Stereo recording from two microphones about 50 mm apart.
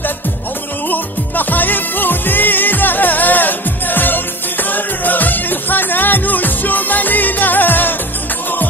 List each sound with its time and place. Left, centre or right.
0.8 s music: left